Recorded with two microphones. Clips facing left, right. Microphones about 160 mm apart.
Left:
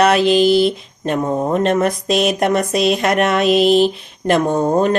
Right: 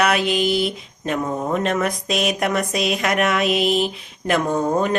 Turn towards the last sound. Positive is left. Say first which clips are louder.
# left 5 dB
turn(degrees=30)  # may be behind; listen again after turning